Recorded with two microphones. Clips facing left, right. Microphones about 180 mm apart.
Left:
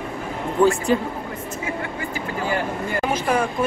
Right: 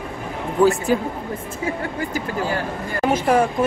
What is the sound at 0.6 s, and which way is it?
Speech, centre (ahead or behind).